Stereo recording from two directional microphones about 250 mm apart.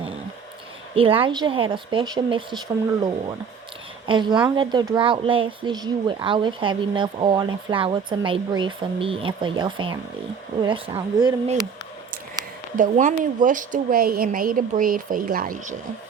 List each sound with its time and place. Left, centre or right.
0.9 s speech: right
4.0 s speech: centre
12.7 s speech: right